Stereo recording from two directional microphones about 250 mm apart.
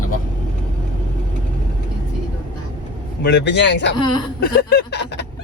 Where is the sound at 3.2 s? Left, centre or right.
Left.